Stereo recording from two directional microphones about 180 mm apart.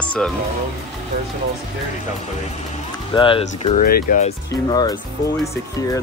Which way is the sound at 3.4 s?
40° left (ahead or behind).